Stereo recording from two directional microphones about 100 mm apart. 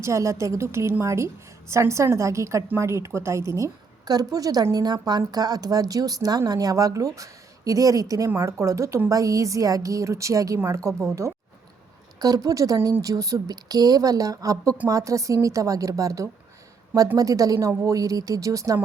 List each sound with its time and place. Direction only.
0.0 s a woman's voice: 30° right (ahead or behind)